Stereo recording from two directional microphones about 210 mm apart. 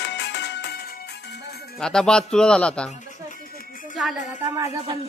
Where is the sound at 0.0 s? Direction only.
55° left (ahead or behind).